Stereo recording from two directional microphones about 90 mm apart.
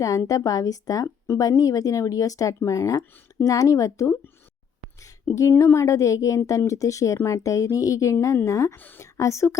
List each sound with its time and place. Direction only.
0.3 s speech: 40° left (ahead or behind)
5.3 s speech: 30° left (ahead or behind)
8.7 s a woman's voice: 20° left (ahead or behind)
9.1 s speech: 35° left (ahead or behind)